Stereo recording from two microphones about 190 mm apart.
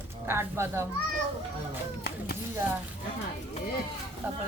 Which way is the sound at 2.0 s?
55° left (ahead or behind).